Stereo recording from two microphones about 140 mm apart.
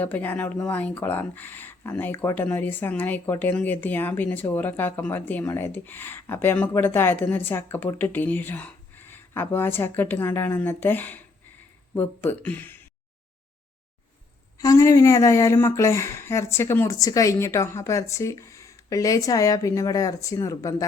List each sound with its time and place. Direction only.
0.0 s speech: 15° left (ahead or behind)
14.6 s a woman's voice: 25° left (ahead or behind)